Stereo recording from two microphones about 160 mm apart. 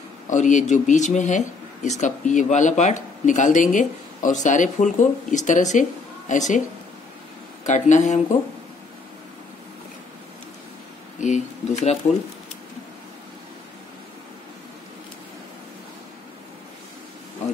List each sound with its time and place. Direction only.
0.3 s speech: 50° left (ahead or behind)
7.6 s speech: 50° left (ahead or behind)
11.1 s speech: 50° left (ahead or behind)